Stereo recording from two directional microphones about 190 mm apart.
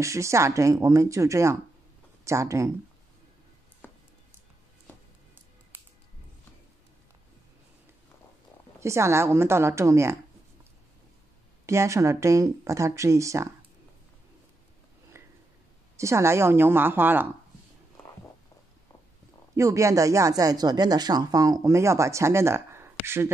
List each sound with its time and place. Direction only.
0.0 s speech: 15° right (ahead or behind)
3.8 s music: 10° left (ahead or behind)
8.7 s speech: 15° right (ahead or behind)
11.6 s speech: 15° right (ahead or behind)
15.2 s a sound: 15° right (ahead or behind)
16.0 s speech: 15° right (ahead or behind)
19.5 s speech: 15° right (ahead or behind)